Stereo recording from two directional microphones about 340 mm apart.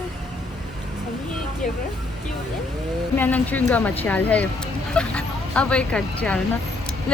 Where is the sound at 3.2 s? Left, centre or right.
Centre.